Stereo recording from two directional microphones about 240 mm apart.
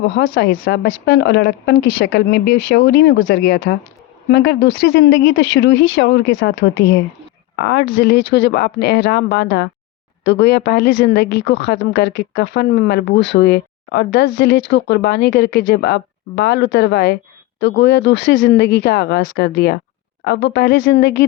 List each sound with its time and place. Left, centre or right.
0.2 s a woman's voice: left